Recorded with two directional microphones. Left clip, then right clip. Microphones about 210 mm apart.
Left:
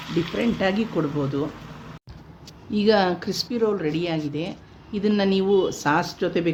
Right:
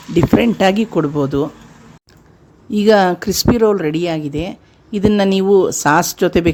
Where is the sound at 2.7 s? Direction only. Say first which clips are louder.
Right 8 dB; 45° right (ahead or behind).